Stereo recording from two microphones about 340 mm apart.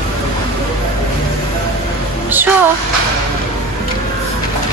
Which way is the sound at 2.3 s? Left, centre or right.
Centre.